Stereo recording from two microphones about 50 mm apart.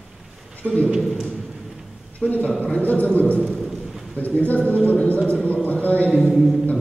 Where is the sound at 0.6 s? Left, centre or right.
Right.